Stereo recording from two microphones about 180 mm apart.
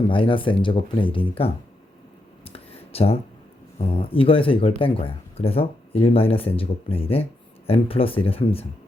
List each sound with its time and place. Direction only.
0.1 s speech: 30° left (ahead or behind)
2.4 s a sound: 35° left (ahead or behind)
3.8 s speech: 30° left (ahead or behind)